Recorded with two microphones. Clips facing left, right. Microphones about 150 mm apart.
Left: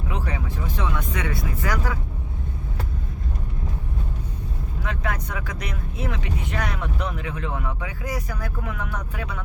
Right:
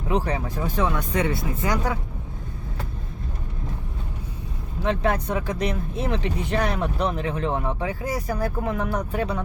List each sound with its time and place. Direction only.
0.1 s speech: 35° right (ahead or behind)
1.1 s speech: 30° right (ahead or behind)
4.8 s speech: 25° right (ahead or behind)